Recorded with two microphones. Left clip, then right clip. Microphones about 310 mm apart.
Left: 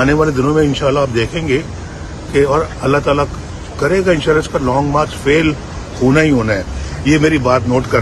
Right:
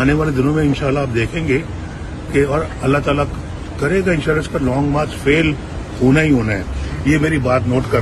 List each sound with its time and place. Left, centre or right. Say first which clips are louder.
0.0 s speech: left 4 dB; centre